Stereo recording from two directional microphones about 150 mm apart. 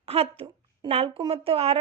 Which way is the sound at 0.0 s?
40° right (ahead or behind).